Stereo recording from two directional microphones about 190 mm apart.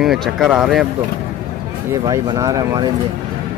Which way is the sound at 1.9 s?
20° right (ahead or behind).